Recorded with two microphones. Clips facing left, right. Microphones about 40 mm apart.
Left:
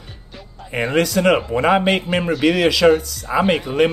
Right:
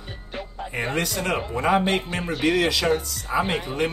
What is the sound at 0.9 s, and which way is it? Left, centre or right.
Speech, left.